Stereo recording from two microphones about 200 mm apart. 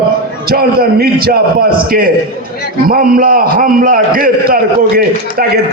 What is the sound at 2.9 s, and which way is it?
A man's voice, 45° right (ahead or behind).